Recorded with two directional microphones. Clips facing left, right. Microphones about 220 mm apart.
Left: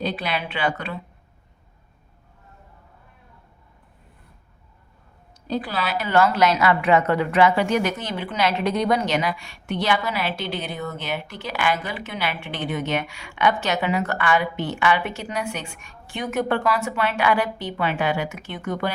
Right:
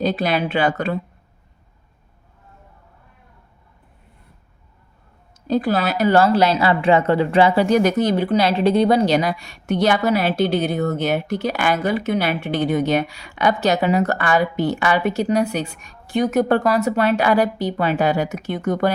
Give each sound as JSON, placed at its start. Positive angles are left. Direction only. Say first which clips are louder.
{"t": 0.0, "sound": "speech", "louder": "right 7 dB", "side_deg": -40}
{"t": 5.5, "sound": "a woman's voice", "louder": "right 7 dB", "side_deg": -45}